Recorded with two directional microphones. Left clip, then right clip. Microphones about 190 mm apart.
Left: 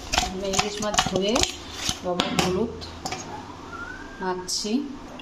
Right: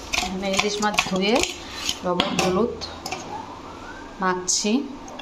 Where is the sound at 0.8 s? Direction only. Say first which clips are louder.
Right 2 dB; 10° right (ahead or behind).